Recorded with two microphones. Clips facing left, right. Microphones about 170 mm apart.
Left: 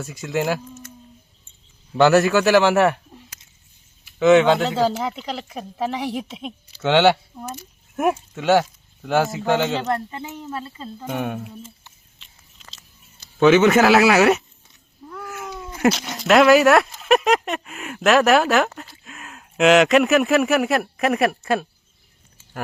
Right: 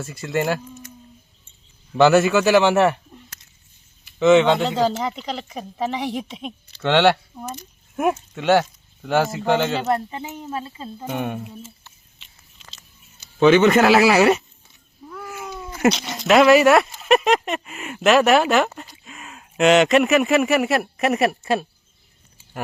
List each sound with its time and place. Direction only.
0.0 s speech: centre (ahead or behind)
1.9 s speech: centre (ahead or behind)
4.0 s speech: centre (ahead or behind)
9.9 s speech: 15° right (ahead or behind)
11.1 s speech: centre (ahead or behind)
12.2 s biting: centre (ahead or behind)
13.4 s speech: 5° left (ahead or behind)
15.1 s cat: 10° right (ahead or behind)
15.4 s cat: centre (ahead or behind)
16.0 s speech: centre (ahead or behind)